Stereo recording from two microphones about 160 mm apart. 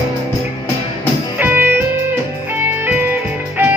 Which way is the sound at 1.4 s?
10° right (ahead or behind).